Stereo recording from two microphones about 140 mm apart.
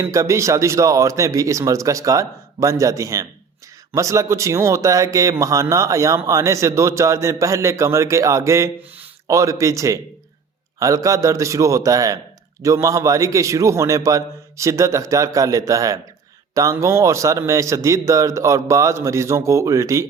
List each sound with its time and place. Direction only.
0.0 s speech: 20° right (ahead or behind)